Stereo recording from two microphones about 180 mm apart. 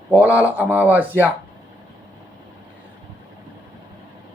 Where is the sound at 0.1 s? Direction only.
10° right (ahead or behind).